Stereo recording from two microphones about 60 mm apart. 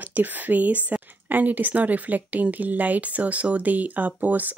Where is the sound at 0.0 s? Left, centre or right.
Right.